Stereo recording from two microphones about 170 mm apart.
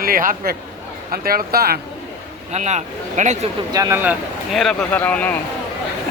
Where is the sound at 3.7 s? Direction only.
20° right (ahead or behind).